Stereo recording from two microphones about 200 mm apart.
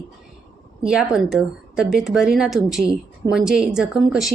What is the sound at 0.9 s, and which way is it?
Speech, 5° right (ahead or behind).